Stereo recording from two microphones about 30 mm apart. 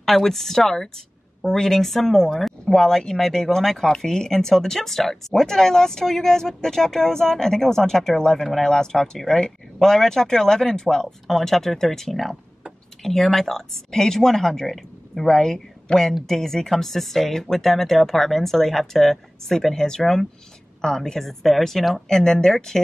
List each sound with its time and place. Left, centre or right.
0.0 s speech: centre
22.0 s speech: centre